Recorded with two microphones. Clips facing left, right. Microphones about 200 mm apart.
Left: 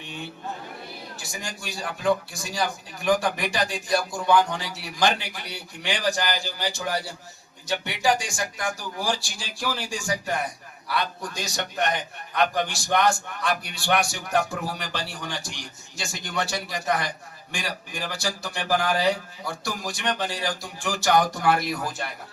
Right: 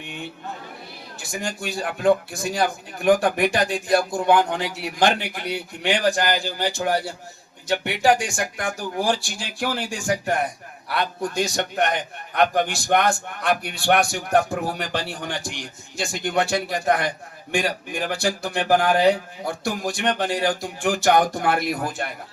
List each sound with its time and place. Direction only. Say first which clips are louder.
1.2 s a man's voice: right 10 dB; 55° right (ahead or behind)